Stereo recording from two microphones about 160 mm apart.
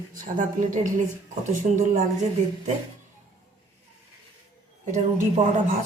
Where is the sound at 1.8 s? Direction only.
50° right (ahead or behind).